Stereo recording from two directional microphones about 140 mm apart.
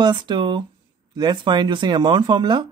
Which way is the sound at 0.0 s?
35° right (ahead or behind).